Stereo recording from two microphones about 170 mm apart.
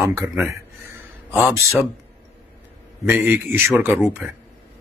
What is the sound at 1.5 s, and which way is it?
Speech, 15° right (ahead or behind).